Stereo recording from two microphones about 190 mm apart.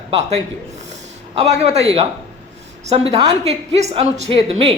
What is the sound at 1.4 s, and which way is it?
A man's voice, 35° right (ahead or behind).